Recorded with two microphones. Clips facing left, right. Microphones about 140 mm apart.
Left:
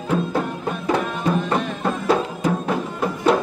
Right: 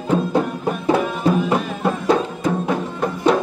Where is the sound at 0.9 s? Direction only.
5° right (ahead or behind).